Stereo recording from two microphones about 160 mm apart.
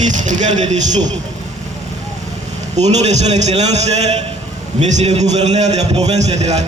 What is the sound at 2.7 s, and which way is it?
A man's voice, 45° right (ahead or behind).